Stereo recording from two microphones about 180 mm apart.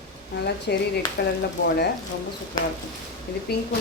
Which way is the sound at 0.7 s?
70° left (ahead or behind).